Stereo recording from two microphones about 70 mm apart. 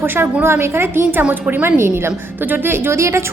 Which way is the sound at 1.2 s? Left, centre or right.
Right.